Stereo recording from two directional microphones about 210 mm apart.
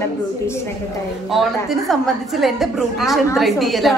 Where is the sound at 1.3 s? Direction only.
Centre (ahead or behind).